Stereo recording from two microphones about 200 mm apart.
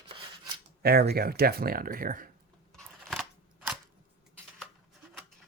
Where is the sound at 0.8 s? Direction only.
50° right (ahead or behind).